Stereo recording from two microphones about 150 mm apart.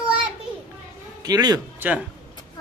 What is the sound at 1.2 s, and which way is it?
Speech, 25° right (ahead or behind).